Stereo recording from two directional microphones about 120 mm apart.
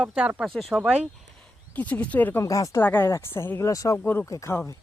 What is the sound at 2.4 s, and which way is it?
Speech, 30° left (ahead or behind).